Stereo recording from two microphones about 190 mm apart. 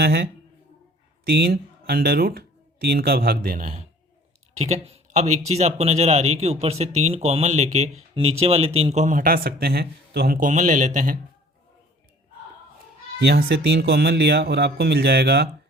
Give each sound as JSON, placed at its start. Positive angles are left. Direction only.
{"t": 0.0, "sound": "a man's voice", "side_deg": -55}
{"t": 13.2, "sound": "a man's voice", "side_deg": -60}